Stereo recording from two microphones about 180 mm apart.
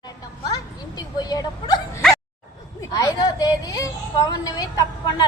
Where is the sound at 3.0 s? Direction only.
20° left (ahead or behind).